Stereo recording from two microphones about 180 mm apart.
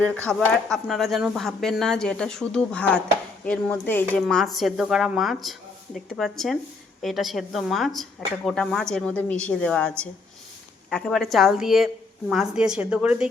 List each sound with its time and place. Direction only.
0.3 s speech: 5° left (ahead or behind)